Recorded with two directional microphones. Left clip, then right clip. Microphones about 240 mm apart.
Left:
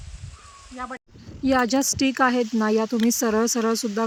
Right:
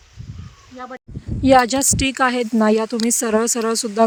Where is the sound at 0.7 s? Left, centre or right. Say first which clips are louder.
Right 1 dB; centre.